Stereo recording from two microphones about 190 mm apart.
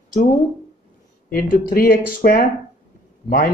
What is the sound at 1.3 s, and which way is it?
Speech, 50° left (ahead or behind).